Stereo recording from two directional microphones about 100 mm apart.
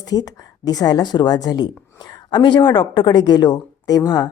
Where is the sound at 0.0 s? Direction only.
40° left (ahead or behind).